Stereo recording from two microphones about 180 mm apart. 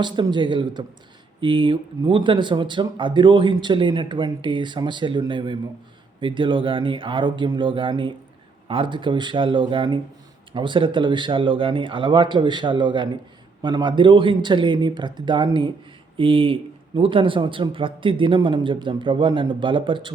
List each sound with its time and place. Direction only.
0.0 s speech: 25° right (ahead or behind)